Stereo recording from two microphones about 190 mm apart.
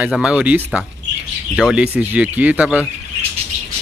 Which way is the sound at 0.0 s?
5° right (ahead or behind).